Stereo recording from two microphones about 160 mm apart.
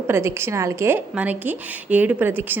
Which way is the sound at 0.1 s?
15° right (ahead or behind).